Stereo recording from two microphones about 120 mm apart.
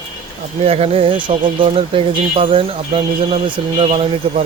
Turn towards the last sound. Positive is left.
turn(degrees=-55)  # may be behind; listen again after turning